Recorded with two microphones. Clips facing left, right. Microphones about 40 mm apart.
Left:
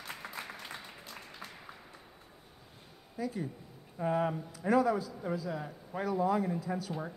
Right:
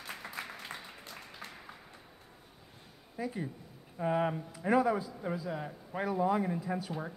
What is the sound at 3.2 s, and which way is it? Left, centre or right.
A man's voice, right.